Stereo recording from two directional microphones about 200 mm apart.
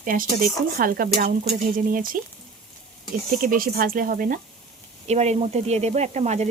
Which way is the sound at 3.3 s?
45° right (ahead or behind).